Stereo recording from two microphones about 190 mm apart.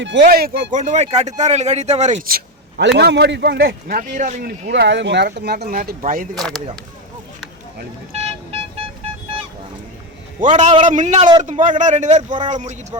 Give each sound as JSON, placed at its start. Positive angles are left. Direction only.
{"t": 0.0, "sound": "speech", "side_deg": -65}
{"t": 2.2, "sound": "a man's voice", "side_deg": -55}
{"t": 4.7, "sound": "a man's voice", "side_deg": -70}
{"t": 6.3, "sound": "speech", "side_deg": 0}
{"t": 10.4, "sound": "speech", "side_deg": -40}